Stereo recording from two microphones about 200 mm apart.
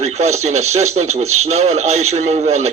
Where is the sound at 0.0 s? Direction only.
35° right (ahead or behind).